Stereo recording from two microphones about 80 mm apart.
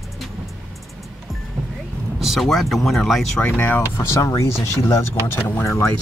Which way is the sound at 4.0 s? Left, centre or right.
Left.